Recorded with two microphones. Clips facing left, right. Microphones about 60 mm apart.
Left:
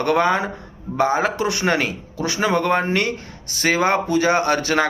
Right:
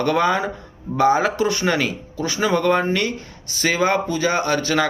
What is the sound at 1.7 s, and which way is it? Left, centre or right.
Speech, left.